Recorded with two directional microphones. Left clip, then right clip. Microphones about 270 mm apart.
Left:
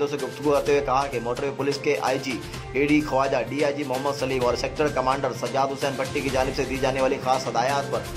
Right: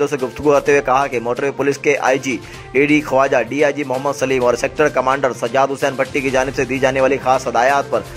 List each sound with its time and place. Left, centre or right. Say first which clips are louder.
0.0 s speech: right 8 dB; right